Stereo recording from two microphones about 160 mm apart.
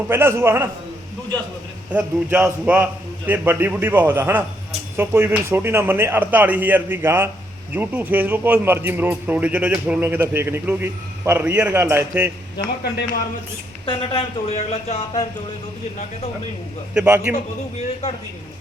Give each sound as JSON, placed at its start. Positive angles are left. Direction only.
{"t": 0.1, "sound": "a man's voice", "side_deg": -15}
{"t": 1.9, "sound": "a man's voice", "side_deg": -10}
{"t": 12.5, "sound": "a man's voice", "side_deg": 90}
{"t": 13.8, "sound": "speech", "side_deg": 35}
{"t": 16.9, "sound": "a man's voice", "side_deg": -5}